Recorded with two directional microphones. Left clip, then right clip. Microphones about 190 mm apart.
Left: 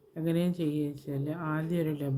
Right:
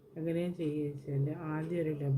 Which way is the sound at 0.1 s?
60° left (ahead or behind).